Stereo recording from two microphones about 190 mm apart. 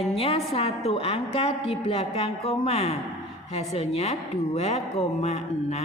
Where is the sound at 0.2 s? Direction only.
30° left (ahead or behind).